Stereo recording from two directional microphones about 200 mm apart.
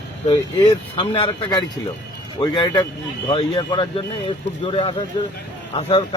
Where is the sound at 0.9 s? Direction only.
25° left (ahead or behind).